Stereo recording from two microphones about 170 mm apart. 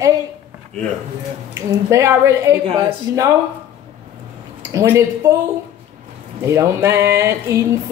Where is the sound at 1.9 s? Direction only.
20° right (ahead or behind).